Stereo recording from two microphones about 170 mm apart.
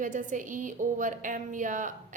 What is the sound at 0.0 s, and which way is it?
A woman's voice, 50° right (ahead or behind).